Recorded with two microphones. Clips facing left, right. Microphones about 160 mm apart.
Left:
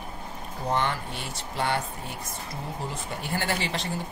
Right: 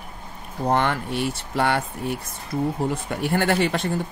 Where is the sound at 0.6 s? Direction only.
60° right (ahead or behind).